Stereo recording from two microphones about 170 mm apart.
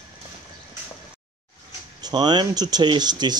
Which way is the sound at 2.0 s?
25° right (ahead or behind).